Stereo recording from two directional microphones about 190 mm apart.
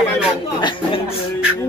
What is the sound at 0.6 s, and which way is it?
Speech, 25° left (ahead or behind).